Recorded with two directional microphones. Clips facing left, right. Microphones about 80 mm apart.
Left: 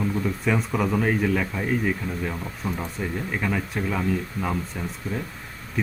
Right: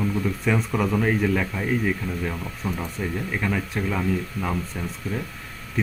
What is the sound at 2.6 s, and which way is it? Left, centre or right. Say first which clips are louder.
Speech: right 1 dB; centre.